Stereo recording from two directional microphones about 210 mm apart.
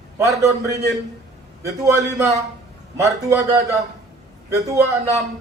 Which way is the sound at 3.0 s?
15° right (ahead or behind).